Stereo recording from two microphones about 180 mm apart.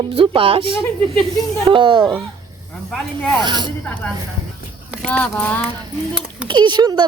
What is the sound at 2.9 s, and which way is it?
Speech, 5° left (ahead or behind).